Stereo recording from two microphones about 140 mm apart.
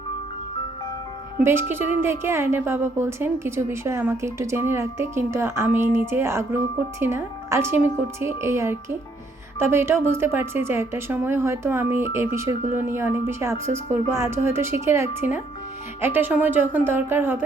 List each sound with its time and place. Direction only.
2.0 s a woman's voice: 15° right (ahead or behind)